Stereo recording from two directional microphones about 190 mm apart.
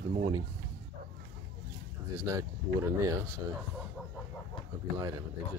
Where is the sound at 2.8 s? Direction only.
15° right (ahead or behind).